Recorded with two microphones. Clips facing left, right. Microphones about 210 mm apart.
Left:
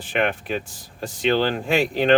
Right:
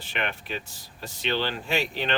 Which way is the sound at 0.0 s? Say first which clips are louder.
Left 9 dB; 50° left (ahead or behind).